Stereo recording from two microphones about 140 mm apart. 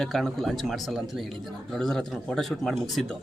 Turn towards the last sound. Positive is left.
turn(degrees=0)  # may be behind; listen again after turning